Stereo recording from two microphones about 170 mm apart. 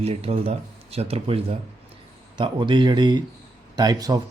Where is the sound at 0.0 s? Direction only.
35° right (ahead or behind).